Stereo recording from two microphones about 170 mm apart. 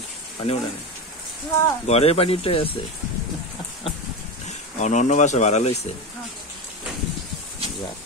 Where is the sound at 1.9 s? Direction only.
35° left (ahead or behind).